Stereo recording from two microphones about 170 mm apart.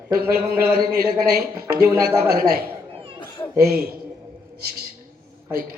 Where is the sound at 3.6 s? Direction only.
60° right (ahead or behind).